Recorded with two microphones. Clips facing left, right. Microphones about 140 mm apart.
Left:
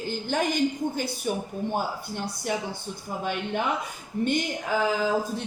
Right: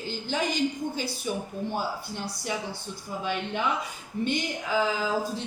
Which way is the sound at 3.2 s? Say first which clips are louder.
Left 2 dB; 50° left (ahead or behind).